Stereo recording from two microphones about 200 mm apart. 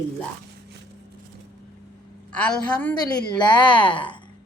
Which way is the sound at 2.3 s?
5° left (ahead or behind).